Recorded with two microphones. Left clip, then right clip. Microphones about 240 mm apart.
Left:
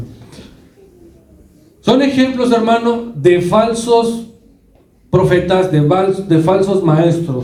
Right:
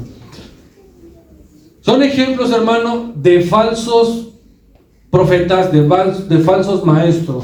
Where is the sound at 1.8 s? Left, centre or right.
Left.